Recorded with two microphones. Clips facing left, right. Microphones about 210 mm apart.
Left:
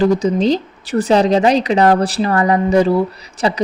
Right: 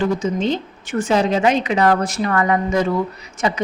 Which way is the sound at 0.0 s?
35° left (ahead or behind).